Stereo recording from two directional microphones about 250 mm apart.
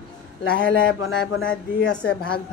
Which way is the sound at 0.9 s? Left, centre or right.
Left.